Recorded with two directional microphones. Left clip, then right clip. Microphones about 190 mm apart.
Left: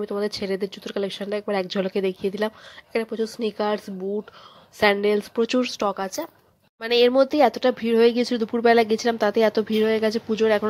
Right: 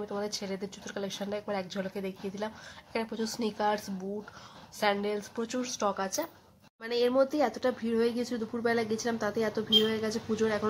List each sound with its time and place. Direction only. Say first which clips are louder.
0.0 s speech: left 9 dB; 30° left (ahead or behind)